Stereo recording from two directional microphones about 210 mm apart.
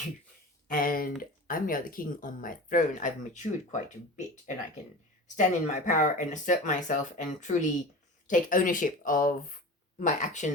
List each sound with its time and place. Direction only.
0.7 s speech: 45° left (ahead or behind)
5.4 s speech: 35° left (ahead or behind)